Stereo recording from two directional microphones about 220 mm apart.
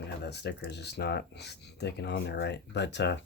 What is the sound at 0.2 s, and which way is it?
Speech, 50° left (ahead or behind).